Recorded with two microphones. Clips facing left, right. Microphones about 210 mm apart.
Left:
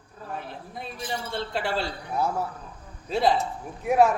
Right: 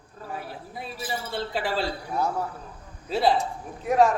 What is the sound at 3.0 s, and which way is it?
Speech, centre (ahead or behind).